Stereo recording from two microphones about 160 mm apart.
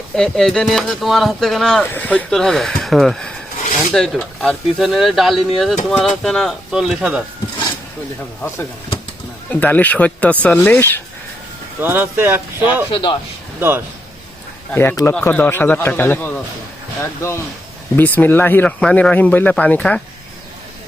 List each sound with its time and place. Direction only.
0.2 s speech: 5° left (ahead or behind)
9.5 s speech: 10° left (ahead or behind)
11.8 s speech: 10° right (ahead or behind)
12.9 s a man's voice: 30° left (ahead or behind)
13.6 s speech: 15° right (ahead or behind)
14.7 s speech: 10° left (ahead or behind)